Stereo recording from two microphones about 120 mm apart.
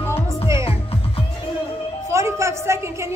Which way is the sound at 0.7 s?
55° left (ahead or behind).